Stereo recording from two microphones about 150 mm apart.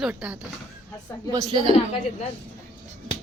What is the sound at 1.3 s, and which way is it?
Speech, 25° right (ahead or behind).